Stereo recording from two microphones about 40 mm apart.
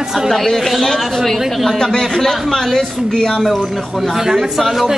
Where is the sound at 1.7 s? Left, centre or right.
Centre.